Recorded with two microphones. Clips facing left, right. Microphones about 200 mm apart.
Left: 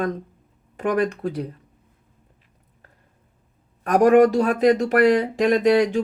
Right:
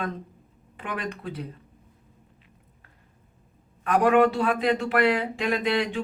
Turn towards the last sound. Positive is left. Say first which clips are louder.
# left 8 dB
turn(degrees=40)  # may be behind; listen again after turning